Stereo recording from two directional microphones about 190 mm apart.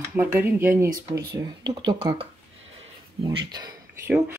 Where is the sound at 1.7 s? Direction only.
25° right (ahead or behind).